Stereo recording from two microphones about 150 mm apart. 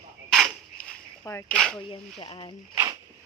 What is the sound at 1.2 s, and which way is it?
Speech, 15° left (ahead or behind).